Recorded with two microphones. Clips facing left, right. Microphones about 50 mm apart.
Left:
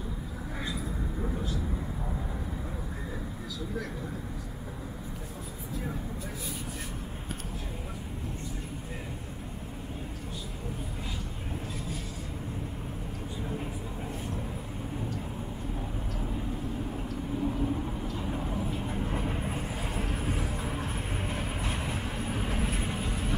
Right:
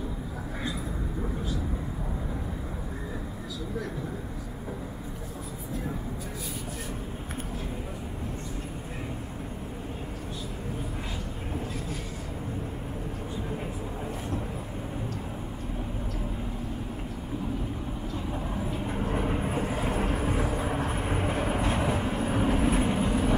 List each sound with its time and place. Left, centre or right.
19.2 s vehicle: centre